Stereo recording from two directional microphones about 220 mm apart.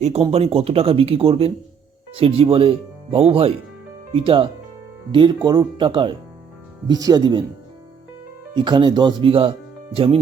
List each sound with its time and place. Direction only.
0.0 s speech: 30° right (ahead or behind)
8.5 s speech: 20° right (ahead or behind)